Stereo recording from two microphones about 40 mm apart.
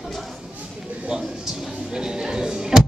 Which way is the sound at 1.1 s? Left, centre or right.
Centre.